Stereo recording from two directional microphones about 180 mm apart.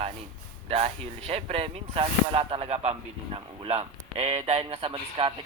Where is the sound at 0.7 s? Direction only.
35° right (ahead or behind).